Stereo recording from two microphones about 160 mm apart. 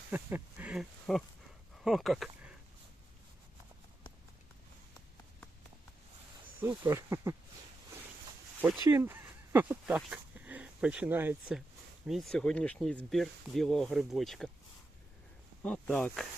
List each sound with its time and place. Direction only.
0.1 s a sound: 10° right (ahead or behind)
6.6 s snake: 15° right (ahead or behind)
8.9 s speech: 15° right (ahead or behind)
12.0 s speech: centre (ahead or behind)
15.6 s speech: 10° left (ahead or behind)